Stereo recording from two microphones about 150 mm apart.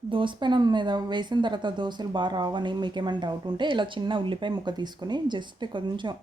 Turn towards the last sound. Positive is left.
turn(degrees=-30)  # may be behind; listen again after turning